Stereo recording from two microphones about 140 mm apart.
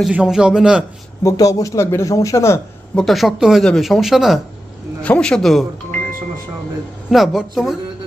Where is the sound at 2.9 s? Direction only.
Centre (ahead or behind).